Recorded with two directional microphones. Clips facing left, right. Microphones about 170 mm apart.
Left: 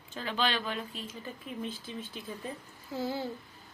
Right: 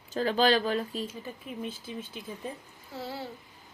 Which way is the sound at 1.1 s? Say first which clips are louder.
Right 2 dB; 15° right (ahead or behind).